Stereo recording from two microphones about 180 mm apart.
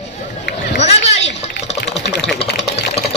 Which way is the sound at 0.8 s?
40° left (ahead or behind).